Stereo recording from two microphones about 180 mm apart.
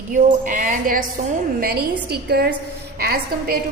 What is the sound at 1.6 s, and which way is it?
A woman's voice, 60° right (ahead or behind).